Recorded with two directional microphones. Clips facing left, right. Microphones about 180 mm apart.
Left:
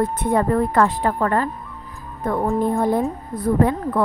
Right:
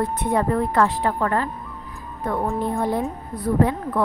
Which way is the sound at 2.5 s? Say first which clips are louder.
Left 4 dB; 50° left (ahead or behind).